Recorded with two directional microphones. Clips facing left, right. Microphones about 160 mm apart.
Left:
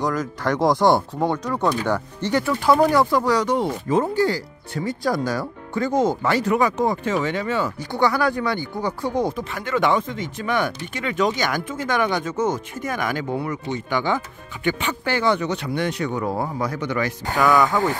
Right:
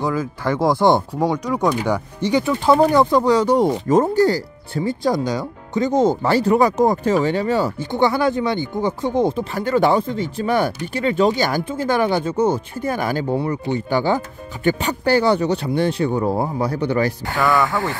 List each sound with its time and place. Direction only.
0.0 s speech: 10° right (ahead or behind); by 3.5 s 25° right (ahead or behind)
3.5 s speech: 40° right (ahead or behind)
7.8 s speech: 25° right (ahead or behind)
17.4 s speech: centre (ahead or behind)
17.6 s speech: 15° left (ahead or behind)